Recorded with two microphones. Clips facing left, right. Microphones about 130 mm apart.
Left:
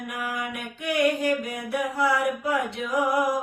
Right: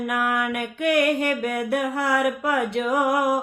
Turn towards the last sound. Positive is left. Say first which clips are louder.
# right 3 dB
turn(degrees=-65)  # may be behind; listen again after turning